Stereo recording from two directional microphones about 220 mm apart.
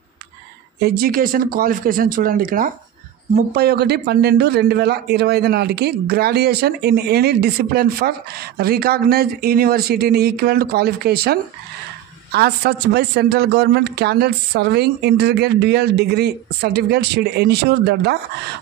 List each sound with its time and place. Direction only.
0.7 s a man's voice: 45° right (ahead or behind)